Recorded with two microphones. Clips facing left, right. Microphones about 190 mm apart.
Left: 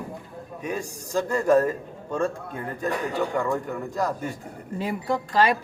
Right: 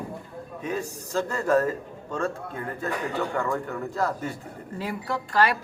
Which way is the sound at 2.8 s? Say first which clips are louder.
Left 3 dB; 15° left (ahead or behind).